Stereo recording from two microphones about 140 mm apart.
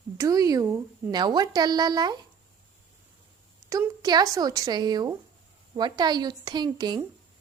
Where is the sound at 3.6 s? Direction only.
25° right (ahead or behind).